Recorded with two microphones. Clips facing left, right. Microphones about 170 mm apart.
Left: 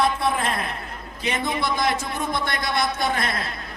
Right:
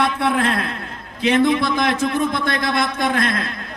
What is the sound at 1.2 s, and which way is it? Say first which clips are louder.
Speech: right 9 dB; 60° right (ahead or behind).